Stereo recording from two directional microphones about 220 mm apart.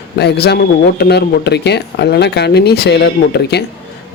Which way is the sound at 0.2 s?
50° left (ahead or behind).